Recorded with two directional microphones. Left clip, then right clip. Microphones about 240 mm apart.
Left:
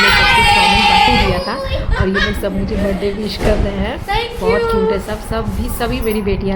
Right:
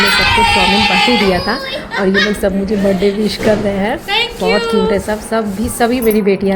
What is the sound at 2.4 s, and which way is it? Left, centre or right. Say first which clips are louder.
A woman's voice: right 5 dB; centre.